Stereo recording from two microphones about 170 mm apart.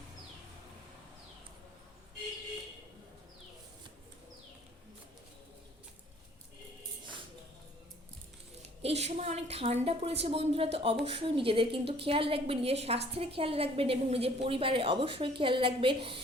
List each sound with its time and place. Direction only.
8.6 s a woman's voice: 40° right (ahead or behind)